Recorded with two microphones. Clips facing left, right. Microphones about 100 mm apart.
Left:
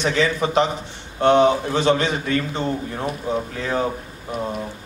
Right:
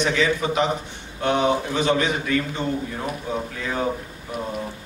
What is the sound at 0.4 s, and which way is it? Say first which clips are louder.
A man's voice: left 3 dB; 35° left (ahead or behind).